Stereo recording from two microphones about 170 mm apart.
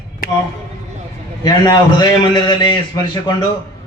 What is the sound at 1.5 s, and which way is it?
A man's voice, 25° left (ahead or behind).